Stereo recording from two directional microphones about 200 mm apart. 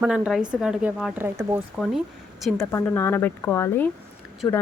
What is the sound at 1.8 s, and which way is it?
Speech, centre (ahead or behind).